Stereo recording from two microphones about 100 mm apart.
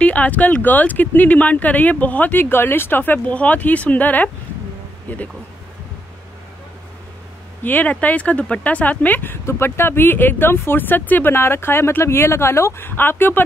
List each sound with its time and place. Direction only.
0.0 s speech: 15° left (ahead or behind)
7.6 s speech: 15° left (ahead or behind)